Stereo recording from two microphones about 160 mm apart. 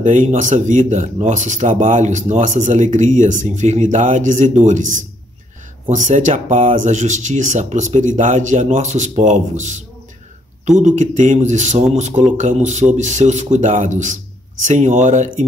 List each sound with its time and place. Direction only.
0.0 s speech: 50° right (ahead or behind)